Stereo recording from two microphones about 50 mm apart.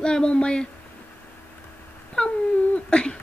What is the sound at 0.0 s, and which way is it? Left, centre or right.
Speech, centre.